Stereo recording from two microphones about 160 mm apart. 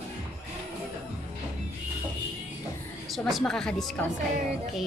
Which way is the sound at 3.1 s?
Centre (ahead or behind).